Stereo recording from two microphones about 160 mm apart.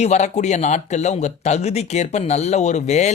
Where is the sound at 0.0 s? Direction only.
45° left (ahead or behind).